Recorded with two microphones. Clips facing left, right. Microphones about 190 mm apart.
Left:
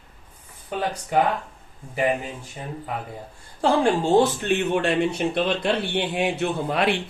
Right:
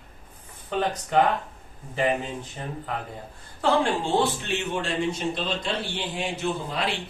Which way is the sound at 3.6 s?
40° left (ahead or behind).